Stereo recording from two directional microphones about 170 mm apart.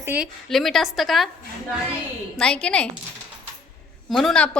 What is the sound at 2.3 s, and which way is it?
Speech, 5° left (ahead or behind).